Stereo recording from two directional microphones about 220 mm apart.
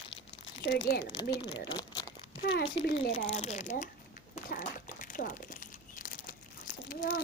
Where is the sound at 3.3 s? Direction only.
30° left (ahead or behind).